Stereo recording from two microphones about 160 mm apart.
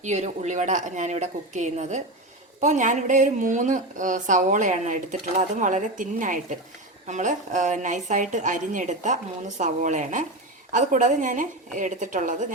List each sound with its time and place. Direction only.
0.0 s a woman's voice: 45° right (ahead or behind)